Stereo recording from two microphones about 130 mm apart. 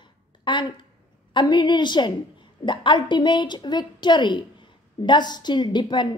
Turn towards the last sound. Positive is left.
turn(degrees=35)  # may be behind; listen again after turning